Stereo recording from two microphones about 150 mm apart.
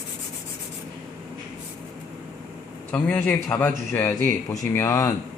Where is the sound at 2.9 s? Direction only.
10° left (ahead or behind).